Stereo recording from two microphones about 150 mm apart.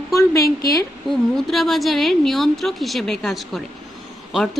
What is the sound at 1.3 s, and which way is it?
Speech, centre (ahead or behind).